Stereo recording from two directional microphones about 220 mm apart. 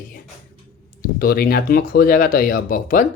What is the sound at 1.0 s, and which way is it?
Speech, 45° left (ahead or behind).